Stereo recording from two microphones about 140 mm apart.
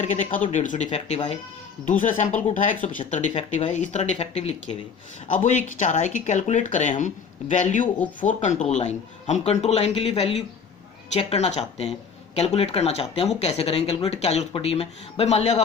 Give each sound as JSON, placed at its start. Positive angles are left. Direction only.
{"t": 0.0, "sound": "speech", "side_deg": 55}
{"t": 1.9, "sound": "speech", "side_deg": 65}
{"t": 5.3, "sound": "speech", "side_deg": 65}